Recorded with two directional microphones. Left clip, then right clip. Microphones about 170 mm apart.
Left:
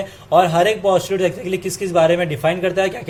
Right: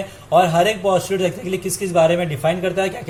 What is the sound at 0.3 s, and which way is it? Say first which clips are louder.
A man's voice: left 1 dB; 30° left (ahead or behind).